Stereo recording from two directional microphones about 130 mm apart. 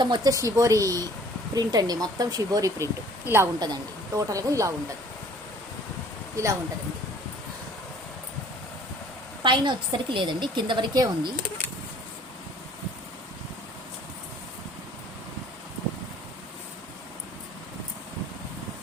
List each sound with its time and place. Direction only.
0.0 s speech: 30° right (ahead or behind)
9.4 s a woman's voice: 40° right (ahead or behind)